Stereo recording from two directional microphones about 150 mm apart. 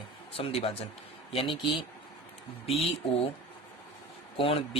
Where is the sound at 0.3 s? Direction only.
40° left (ahead or behind).